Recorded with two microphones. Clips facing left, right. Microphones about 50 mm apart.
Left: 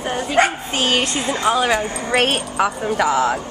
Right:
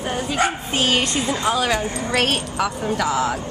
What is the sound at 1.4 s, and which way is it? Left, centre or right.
A woman's voice, centre.